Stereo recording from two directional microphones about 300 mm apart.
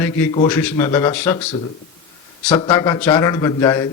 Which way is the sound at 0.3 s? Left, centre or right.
Centre.